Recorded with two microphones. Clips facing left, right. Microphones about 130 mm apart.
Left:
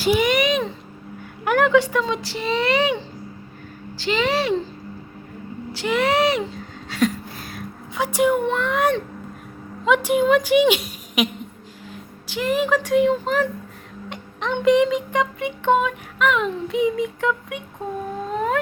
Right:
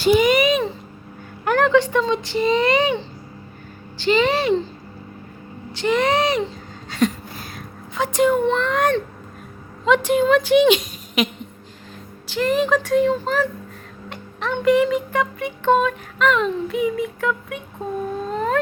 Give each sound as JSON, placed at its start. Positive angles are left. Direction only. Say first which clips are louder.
{"t": 0.0, "sound": "a sound", "louder": "right 3 dB", "side_deg": 5}
{"t": 1.5, "sound": "a child's voice", "louder": "even", "side_deg": 10}
{"t": 4.0, "sound": "a child's voice", "louder": "right 3 dB", "side_deg": 0}
{"t": 5.7, "sound": "a child's voice", "louder": "right 1 dB", "side_deg": 5}
{"t": 6.9, "sound": "a sound", "louder": "right 1 dB", "side_deg": 0}
{"t": 7.9, "sound": "speech", "louder": "right 1 dB", "side_deg": 10}
{"t": 12.3, "sound": "speech", "louder": "right 2 dB", "side_deg": 10}
{"t": 18.3, "sound": "howl", "louder": "right 1 dB", "side_deg": 15}